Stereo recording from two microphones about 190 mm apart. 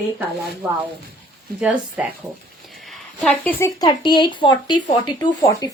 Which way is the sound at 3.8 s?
20° left (ahead or behind).